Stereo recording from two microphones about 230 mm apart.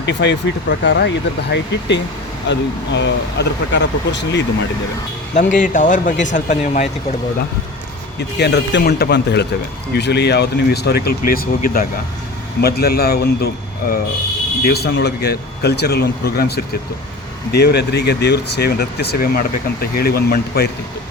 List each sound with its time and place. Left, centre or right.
0.0 s speech: left
5.3 s speech: left
8.4 s speech: left